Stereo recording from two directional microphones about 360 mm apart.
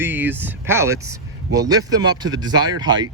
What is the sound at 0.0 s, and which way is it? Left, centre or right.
Speech, centre.